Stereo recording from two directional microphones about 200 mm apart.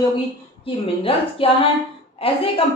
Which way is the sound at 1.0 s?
25° left (ahead or behind).